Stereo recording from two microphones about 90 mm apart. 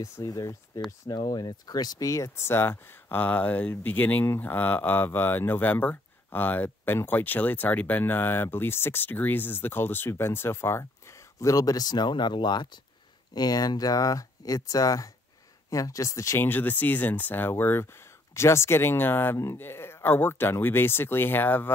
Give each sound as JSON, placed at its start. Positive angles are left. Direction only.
{"t": 0.0, "sound": "speech", "side_deg": 45}
{"t": 16.4, "sound": "speech", "side_deg": 20}